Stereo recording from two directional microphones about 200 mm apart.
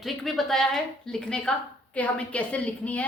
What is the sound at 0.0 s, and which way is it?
A woman's voice, centre (ahead or behind).